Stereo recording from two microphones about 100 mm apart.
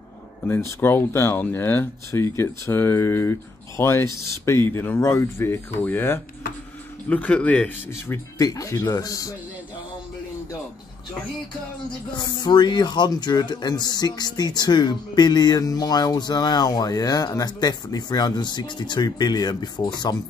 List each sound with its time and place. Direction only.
0.5 s speech: 25° left (ahead or behind)
8.4 s speech: 35° left (ahead or behind)
12.2 s speech: 45° left (ahead or behind)